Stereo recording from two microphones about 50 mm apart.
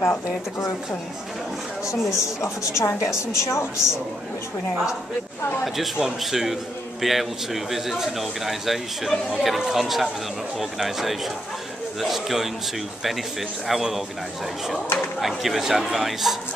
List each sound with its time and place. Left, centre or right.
1.9 s a woman's voice: left
5.9 s a man's voice: centre
13.7 s a man's voice: centre
15.1 s a man's voice: centre